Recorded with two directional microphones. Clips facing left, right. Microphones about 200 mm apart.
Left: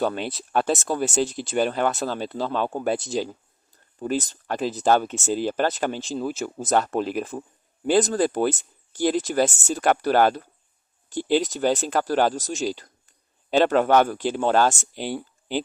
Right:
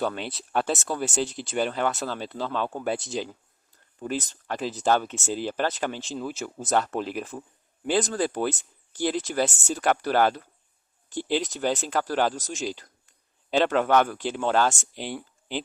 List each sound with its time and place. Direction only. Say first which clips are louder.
0.0 s speech: left 4 dB; 40° left (ahead or behind)